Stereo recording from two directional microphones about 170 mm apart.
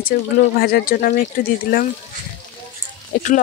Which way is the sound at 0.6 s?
65° left (ahead or behind).